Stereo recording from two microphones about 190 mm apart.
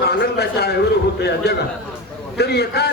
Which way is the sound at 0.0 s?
60° left (ahead or behind).